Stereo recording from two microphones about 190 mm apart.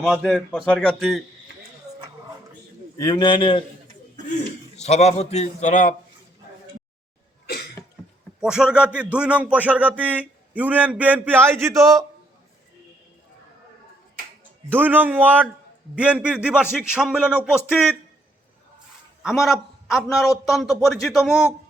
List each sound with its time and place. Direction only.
0.0 s a man's voice: centre (ahead or behind)
3.0 s a man's voice: 20° left (ahead or behind)
4.8 s a man's voice: 35° left (ahead or behind)
7.8 s cough: 20° left (ahead or behind)
8.4 s music: 5° right (ahead or behind)
14.7 s music: 10° right (ahead or behind)
16.0 s a man's voice: 5° right (ahead or behind)
19.2 s a man's voice: centre (ahead or behind)